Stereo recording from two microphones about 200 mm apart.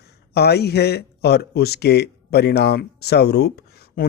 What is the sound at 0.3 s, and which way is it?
Speech, 55° left (ahead or behind).